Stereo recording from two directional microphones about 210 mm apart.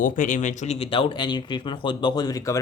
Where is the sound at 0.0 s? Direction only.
35° left (ahead or behind).